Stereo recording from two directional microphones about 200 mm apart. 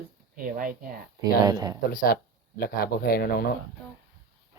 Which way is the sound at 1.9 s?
45° left (ahead or behind).